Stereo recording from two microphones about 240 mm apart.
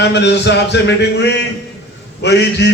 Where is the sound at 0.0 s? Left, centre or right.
Left.